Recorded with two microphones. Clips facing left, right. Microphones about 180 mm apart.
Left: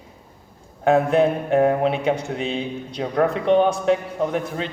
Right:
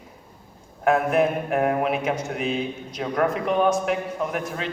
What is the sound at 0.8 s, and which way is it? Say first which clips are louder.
A man's voice: left 3 dB; 30° left (ahead or behind).